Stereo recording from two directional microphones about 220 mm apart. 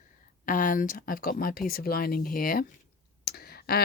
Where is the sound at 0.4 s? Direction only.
35° left (ahead or behind).